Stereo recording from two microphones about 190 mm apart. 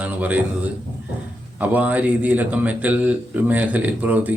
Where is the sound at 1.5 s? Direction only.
10° right (ahead or behind).